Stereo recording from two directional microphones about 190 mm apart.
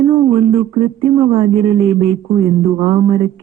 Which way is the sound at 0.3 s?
30° right (ahead or behind).